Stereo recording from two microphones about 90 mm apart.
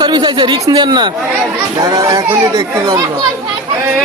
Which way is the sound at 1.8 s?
40° right (ahead or behind).